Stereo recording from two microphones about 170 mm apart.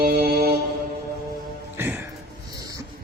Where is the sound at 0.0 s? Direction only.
65° right (ahead or behind).